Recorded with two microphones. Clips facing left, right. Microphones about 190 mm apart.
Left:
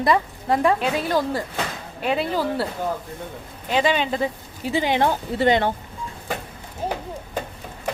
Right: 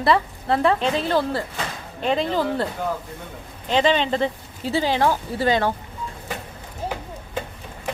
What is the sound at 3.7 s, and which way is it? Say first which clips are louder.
Speech: right 2 dB; 10° left (ahead or behind).